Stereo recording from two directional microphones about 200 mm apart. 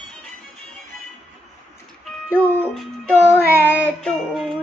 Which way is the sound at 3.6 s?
10° left (ahead or behind).